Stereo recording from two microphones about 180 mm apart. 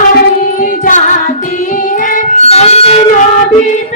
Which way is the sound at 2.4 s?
35° left (ahead or behind).